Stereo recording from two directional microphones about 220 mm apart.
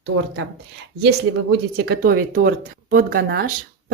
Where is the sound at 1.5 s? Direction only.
50° right (ahead or behind).